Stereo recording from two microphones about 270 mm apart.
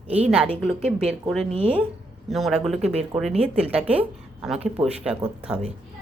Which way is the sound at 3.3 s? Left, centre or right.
Right.